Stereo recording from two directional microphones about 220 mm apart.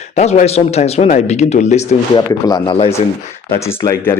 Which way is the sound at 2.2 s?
20° left (ahead or behind).